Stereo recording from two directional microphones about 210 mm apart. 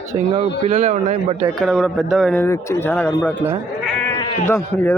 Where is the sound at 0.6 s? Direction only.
30° right (ahead or behind).